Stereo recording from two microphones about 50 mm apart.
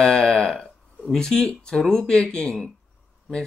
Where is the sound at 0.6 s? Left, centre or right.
Left.